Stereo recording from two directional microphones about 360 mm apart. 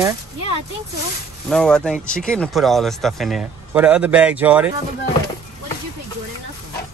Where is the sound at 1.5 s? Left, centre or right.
Centre.